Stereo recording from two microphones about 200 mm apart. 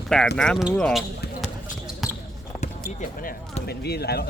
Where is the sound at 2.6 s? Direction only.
40° left (ahead or behind).